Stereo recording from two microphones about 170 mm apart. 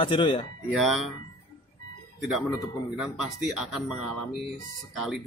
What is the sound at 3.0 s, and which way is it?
Speech, centre (ahead or behind).